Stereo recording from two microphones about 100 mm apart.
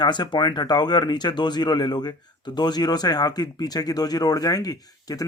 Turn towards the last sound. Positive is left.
turn(degrees=40)  # may be behind; listen again after turning